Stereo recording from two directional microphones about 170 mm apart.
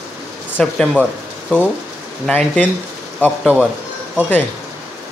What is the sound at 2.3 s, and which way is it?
Speech, 10° left (ahead or behind).